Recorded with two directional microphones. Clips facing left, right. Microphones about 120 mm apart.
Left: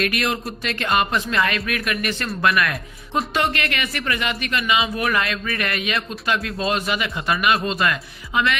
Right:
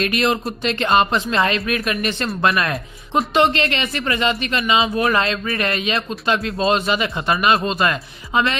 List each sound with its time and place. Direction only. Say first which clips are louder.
0.0 s speech: right 4 dB; 25° right (ahead or behind)